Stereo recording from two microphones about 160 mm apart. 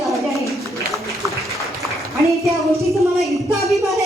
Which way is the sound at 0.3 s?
20° right (ahead or behind).